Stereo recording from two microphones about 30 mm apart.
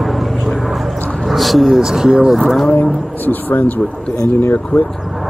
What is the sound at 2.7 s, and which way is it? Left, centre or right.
Speech, left.